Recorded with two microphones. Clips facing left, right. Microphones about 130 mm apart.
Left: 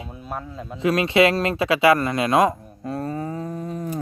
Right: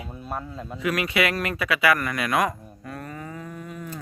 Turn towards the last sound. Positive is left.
turn(degrees=35)  # may be behind; listen again after turning